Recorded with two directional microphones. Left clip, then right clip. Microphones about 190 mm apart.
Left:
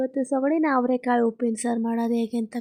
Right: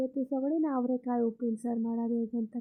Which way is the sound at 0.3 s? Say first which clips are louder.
Left 9 dB; 30° left (ahead or behind).